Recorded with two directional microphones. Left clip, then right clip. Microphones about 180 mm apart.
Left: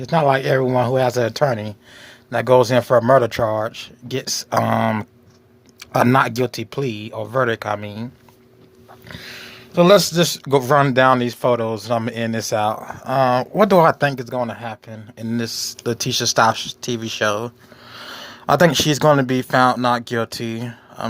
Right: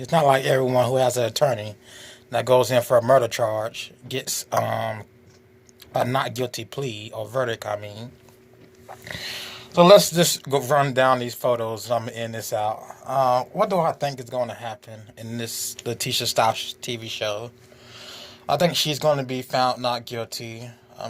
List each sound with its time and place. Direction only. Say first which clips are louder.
0.0 s speech: left 2 dB; 20° left (ahead or behind); by 13.8 s 45° left (ahead or behind)
13.8 s speech: left 8 dB; 30° left (ahead or behind)